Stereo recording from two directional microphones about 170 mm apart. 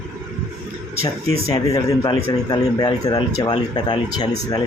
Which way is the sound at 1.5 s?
20° left (ahead or behind).